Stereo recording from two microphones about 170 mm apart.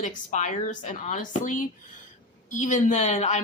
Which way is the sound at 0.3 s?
50° left (ahead or behind).